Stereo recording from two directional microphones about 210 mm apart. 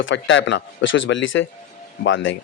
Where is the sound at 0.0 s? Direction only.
60° left (ahead or behind).